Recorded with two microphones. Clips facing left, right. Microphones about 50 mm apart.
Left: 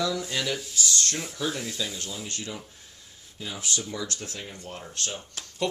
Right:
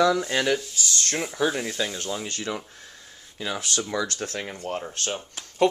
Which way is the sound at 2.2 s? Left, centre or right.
Right.